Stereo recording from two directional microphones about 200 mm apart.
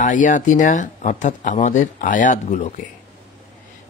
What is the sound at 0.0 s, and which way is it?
Speech, 40° left (ahead or behind).